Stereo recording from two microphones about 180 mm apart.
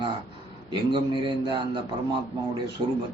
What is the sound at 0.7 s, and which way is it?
Speech, 25° right (ahead or behind).